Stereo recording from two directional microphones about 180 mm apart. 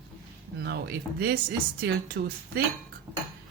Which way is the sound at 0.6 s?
65° right (ahead or behind).